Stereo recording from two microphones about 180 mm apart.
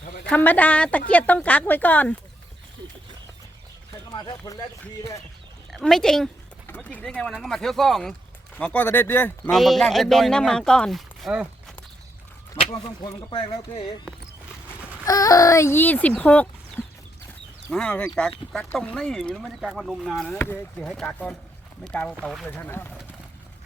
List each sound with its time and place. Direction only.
0.3 s a woman's voice: 10° left (ahead or behind)
4.1 s speech: 20° left (ahead or behind)
5.7 s a woman's voice: centre (ahead or behind)
12.7 s speech: 25° left (ahead or behind)
15.0 s a woman's voice: 20° left (ahead or behind)
17.7 s a woman's voice: 5° left (ahead or behind)